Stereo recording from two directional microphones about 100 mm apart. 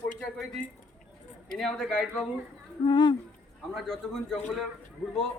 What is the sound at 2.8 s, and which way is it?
Speech, 50° left (ahead or behind).